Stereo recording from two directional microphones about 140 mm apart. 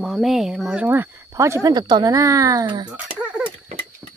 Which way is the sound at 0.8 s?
15° right (ahead or behind).